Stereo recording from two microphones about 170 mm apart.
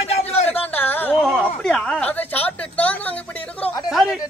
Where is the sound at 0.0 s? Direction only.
40° left (ahead or behind).